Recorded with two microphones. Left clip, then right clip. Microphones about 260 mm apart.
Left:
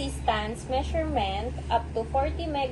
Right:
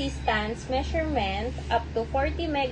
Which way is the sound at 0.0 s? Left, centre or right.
Right.